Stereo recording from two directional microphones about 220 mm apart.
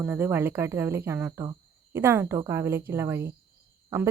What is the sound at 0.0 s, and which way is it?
Speech, 10° right (ahead or behind).